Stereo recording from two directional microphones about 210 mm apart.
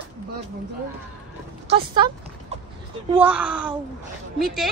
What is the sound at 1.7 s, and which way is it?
Speech, 25° right (ahead or behind).